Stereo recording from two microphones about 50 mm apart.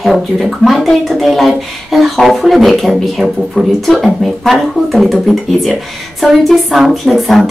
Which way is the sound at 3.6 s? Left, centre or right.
Left.